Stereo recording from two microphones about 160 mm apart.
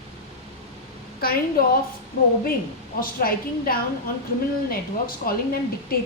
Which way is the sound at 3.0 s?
65° left (ahead or behind).